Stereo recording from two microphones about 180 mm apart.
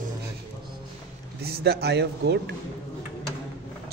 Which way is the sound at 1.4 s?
60° right (ahead or behind).